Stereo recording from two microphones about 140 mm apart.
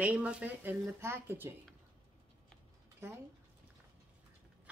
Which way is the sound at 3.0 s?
20° right (ahead or behind).